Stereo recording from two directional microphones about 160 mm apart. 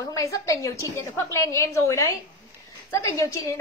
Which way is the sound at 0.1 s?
20° left (ahead or behind).